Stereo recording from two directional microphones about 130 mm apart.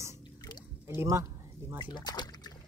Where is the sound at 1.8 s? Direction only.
35° left (ahead or behind).